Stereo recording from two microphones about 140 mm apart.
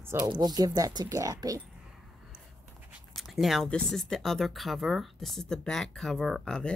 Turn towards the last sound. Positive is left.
turn(degrees=5)  # may be behind; listen again after turning